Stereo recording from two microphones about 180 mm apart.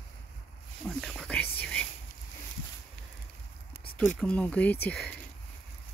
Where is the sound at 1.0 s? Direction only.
5° left (ahead or behind).